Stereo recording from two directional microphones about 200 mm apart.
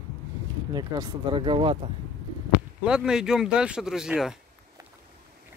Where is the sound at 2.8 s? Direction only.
5° right (ahead or behind).